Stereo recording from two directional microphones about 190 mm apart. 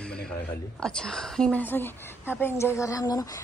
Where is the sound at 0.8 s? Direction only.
5° left (ahead or behind).